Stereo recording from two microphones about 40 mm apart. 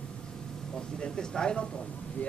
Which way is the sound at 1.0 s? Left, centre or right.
Centre.